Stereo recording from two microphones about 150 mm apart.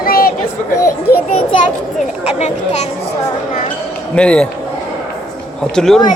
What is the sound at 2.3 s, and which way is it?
Speech, 45° left (ahead or behind).